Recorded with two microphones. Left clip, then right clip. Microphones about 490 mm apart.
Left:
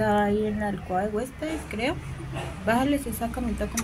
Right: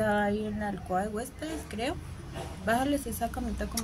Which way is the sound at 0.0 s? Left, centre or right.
Right.